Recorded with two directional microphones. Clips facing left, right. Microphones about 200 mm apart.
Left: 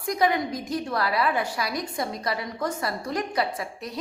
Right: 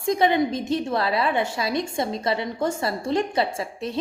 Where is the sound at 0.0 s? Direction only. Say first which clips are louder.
Right 4 dB; 25° right (ahead or behind).